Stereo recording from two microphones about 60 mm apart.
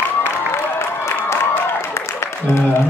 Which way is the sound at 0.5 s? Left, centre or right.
Left.